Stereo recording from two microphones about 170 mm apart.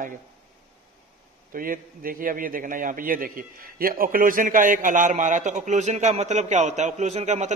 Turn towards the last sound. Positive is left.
turn(degrees=-45)  # may be behind; listen again after turning